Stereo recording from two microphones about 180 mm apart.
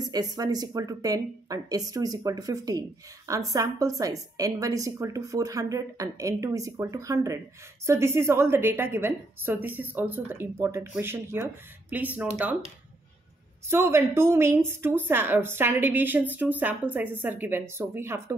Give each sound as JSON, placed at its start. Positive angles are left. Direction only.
{"t": 0.1, "sound": "a woman's voice", "side_deg": -20}
{"t": 13.7, "sound": "a woman's voice", "side_deg": -15}